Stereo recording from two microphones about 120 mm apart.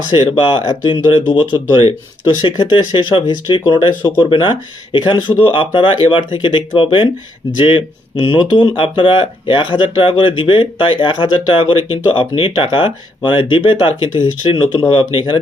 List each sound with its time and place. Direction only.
0.1 s speech: 45° left (ahead or behind)